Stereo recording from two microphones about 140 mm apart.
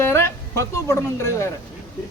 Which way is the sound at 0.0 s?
20° left (ahead or behind).